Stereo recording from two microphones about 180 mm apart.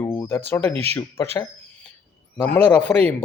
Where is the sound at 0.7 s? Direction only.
35° right (ahead or behind).